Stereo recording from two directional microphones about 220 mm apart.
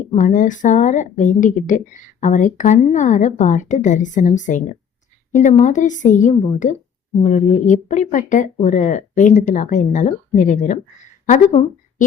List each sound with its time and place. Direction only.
0.1 s a woman's voice: 35° left (ahead or behind)